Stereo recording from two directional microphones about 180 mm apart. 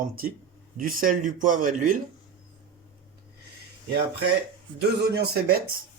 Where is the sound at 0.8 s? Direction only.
50° right (ahead or behind).